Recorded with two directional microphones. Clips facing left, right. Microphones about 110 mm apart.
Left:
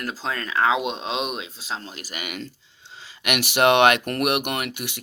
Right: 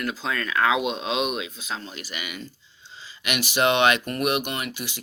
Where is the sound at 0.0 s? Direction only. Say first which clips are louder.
Right 1 dB; 35° left (ahead or behind).